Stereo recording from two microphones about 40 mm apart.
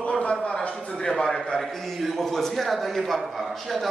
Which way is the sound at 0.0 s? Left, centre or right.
Left.